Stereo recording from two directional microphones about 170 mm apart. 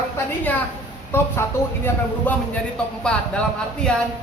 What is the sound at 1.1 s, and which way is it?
Speech, 15° left (ahead or behind).